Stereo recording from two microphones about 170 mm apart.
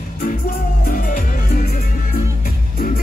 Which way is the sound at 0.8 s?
55° left (ahead or behind).